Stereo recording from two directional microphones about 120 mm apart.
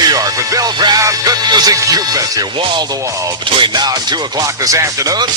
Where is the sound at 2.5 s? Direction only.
40° right (ahead or behind).